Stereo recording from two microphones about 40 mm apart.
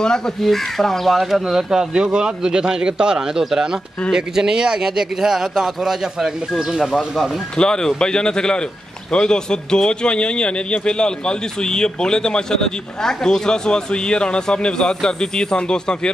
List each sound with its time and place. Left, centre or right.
0.4 s speech: centre
7.5 s a man's voice: centre